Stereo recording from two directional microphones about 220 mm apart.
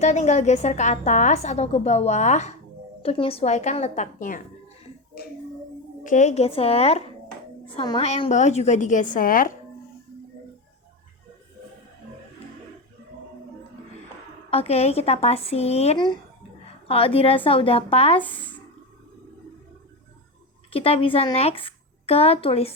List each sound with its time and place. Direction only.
0.0 s a woman's voice: 30° left (ahead or behind)
6.0 s a woman's voice: 35° left (ahead or behind)
14.5 s speech: 25° left (ahead or behind)
20.7 s speech: 25° left (ahead or behind)